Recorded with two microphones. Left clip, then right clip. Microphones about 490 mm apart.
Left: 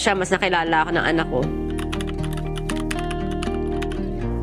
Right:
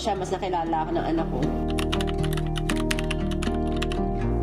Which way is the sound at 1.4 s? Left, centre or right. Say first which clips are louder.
Left 1 dB; centre.